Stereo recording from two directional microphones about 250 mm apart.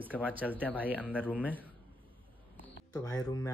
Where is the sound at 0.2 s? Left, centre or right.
Centre.